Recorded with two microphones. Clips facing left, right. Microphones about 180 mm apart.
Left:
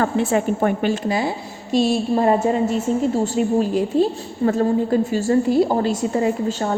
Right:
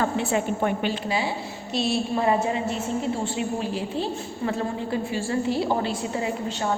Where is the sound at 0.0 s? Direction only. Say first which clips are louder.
Left 5 dB; 50° left (ahead or behind).